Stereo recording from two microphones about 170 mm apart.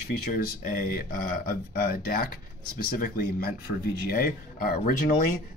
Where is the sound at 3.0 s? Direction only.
60° left (ahead or behind).